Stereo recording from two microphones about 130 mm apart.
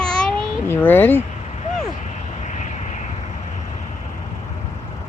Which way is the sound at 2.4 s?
65° left (ahead or behind).